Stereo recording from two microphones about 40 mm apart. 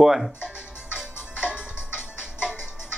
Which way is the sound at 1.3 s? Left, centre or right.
Right.